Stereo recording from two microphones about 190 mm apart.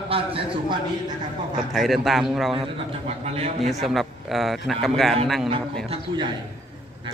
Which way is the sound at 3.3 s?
30° right (ahead or behind).